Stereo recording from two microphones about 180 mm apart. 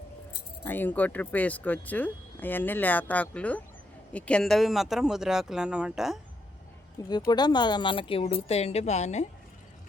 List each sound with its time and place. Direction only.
0.6 s speech: 10° left (ahead or behind)
7.3 s a woman's voice: 25° left (ahead or behind); by 9.2 s 40° left (ahead or behind)